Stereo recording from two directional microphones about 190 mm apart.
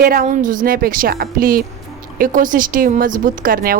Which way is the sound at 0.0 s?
50° right (ahead or behind).